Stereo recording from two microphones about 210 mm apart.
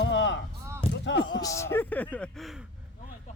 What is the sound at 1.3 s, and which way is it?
Speech, 15° left (ahead or behind).